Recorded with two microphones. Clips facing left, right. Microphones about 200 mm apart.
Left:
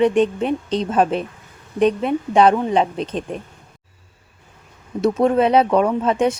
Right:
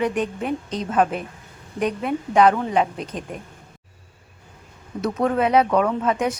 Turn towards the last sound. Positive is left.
turn(degrees=25)  # may be behind; listen again after turning